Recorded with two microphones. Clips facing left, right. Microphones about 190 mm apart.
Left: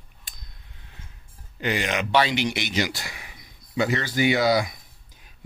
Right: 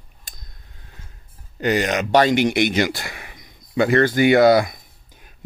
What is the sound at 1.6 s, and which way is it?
Speech, 40° right (ahead or behind).